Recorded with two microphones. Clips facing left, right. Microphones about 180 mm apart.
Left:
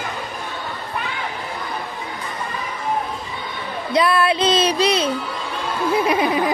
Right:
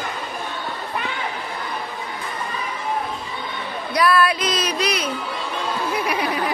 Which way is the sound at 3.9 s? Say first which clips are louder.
Left 1 dB; 25° left (ahead or behind).